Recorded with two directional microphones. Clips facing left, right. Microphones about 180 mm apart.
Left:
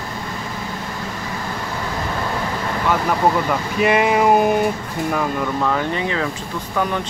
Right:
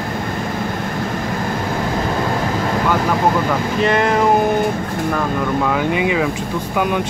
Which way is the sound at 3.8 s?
10° left (ahead or behind).